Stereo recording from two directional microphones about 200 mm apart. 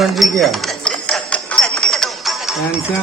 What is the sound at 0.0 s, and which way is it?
Music, centre (ahead or behind).